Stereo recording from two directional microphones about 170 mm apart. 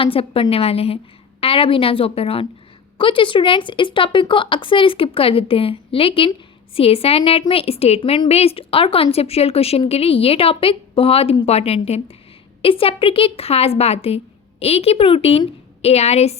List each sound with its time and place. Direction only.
0.0 s a woman's voice: 35° left (ahead or behind)